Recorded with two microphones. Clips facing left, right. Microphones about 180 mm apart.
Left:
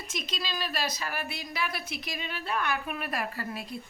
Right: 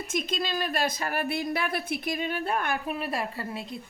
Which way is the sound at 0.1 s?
50° right (ahead or behind).